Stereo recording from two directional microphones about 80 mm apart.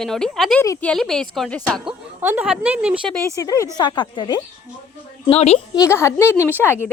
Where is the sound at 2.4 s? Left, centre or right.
Centre.